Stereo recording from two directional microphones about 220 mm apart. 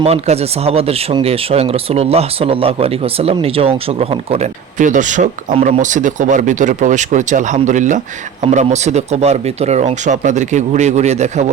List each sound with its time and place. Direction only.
0.0 s speech: 30° right (ahead or behind)